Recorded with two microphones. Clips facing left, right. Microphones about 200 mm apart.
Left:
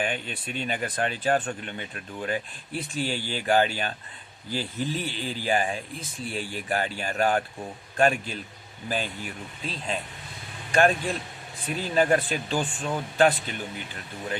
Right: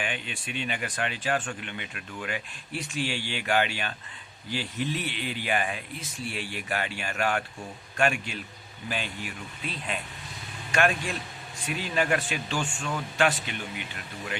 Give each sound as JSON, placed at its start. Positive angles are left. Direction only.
{"t": 0.0, "sound": "speech", "side_deg": 40}